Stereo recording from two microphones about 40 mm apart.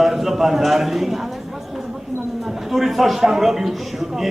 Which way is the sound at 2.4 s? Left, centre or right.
Centre.